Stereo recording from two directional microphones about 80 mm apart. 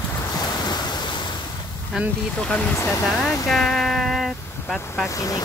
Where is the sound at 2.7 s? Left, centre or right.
Left.